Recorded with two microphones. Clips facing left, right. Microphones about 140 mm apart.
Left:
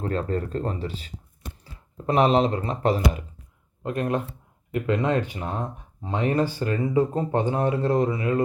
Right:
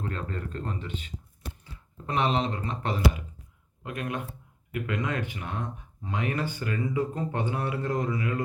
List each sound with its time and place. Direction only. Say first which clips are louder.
0.0 s speech: left 8 dB; 35° left (ahead or behind)